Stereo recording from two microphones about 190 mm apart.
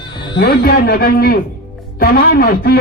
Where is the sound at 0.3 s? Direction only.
55° left (ahead or behind).